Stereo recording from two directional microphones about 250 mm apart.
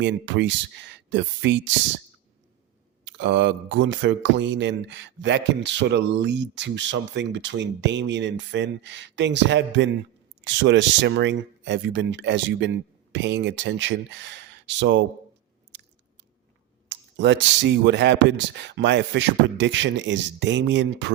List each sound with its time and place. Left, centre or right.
0.0 s speech: right
3.0 s speech: right
16.9 s speech: right